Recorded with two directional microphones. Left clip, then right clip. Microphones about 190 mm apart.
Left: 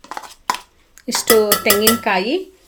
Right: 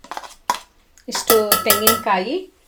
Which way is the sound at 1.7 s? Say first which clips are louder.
Left 2 dB; 35° left (ahead or behind).